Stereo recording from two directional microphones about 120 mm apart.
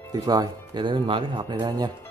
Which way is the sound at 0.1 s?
35° right (ahead or behind).